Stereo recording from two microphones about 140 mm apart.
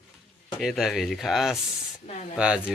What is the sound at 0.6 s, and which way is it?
Speech, centre (ahead or behind).